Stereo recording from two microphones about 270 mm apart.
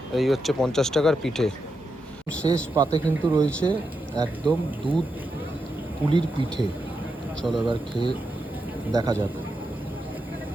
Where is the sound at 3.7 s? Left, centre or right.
Centre.